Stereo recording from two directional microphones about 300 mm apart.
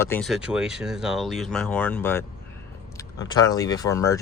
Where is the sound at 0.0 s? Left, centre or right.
Centre.